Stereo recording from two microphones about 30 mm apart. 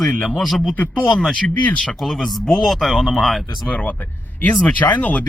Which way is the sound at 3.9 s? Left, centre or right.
Left.